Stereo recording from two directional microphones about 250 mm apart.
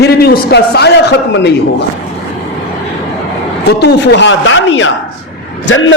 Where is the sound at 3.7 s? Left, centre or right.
Left.